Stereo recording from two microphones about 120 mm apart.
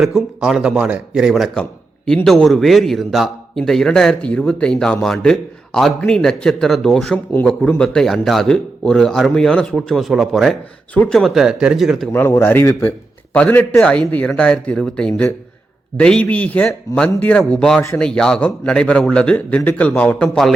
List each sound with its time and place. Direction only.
0.0 s speech: centre (ahead or behind)
10.9 s speech: 10° left (ahead or behind)
11.2 s speech: 5° right (ahead or behind)
12.1 s a man's voice: 20° left (ahead or behind)